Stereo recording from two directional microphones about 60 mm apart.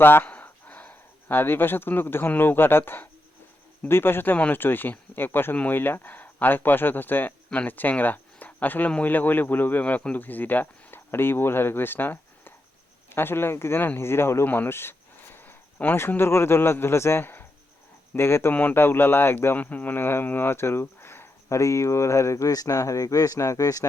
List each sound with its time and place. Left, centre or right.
0.0 s speech: left
0.3 s a sound: left
2.4 s speech: left
14.4 s a man's voice: left
21.5 s speech: left